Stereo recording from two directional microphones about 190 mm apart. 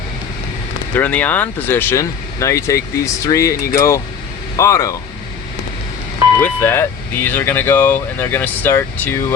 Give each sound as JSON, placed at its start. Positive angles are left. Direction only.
{"t": 0.9, "sound": "speech", "side_deg": 10}
{"t": 6.4, "sound": "speech", "side_deg": 10}